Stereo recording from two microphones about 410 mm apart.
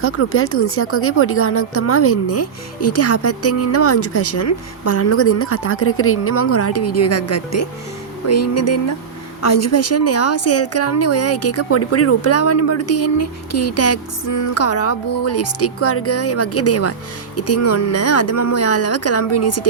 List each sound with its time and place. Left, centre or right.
0.0 s speech: left